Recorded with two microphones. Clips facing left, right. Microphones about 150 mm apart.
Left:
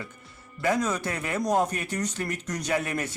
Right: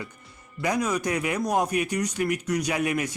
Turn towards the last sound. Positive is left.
turn(degrees=-10)  # may be behind; listen again after turning